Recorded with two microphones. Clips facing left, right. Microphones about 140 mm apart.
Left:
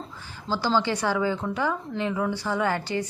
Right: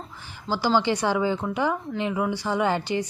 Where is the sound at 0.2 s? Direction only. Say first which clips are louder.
Right 2 dB; 15° right (ahead or behind).